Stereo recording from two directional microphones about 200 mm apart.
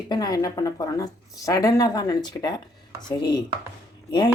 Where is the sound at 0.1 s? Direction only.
20° left (ahead or behind).